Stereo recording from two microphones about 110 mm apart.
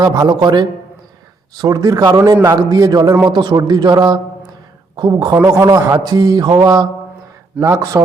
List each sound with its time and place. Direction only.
0.0 s a man's voice: 35° right (ahead or behind)